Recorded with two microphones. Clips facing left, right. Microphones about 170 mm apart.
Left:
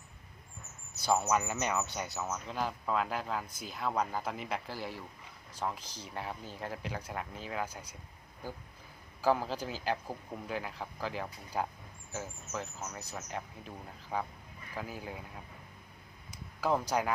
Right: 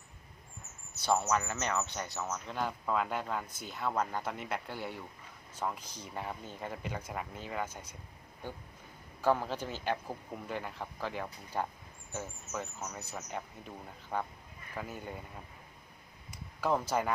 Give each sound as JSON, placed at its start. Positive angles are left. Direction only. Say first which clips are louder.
{"t": 1.0, "sound": "speech", "louder": "left 1 dB", "side_deg": 10}
{"t": 5.8, "sound": "speech", "louder": "even", "side_deg": 30}
{"t": 6.1, "sound": "speech", "louder": "even", "side_deg": 0}
{"t": 9.2, "sound": "speech", "louder": "even", "side_deg": 5}
{"t": 16.6, "sound": "speech", "louder": "even", "side_deg": 0}